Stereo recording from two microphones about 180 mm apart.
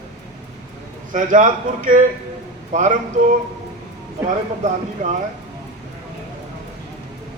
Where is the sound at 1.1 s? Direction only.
45° right (ahead or behind).